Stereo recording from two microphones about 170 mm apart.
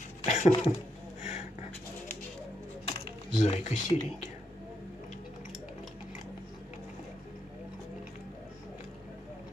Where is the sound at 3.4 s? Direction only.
40° left (ahead or behind).